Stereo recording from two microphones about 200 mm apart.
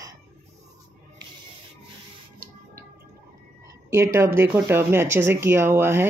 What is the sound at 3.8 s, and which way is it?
Speech, 15° right (ahead or behind).